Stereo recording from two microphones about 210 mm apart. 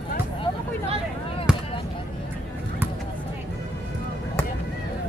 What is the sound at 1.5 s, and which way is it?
Fireworks, 5° right (ahead or behind).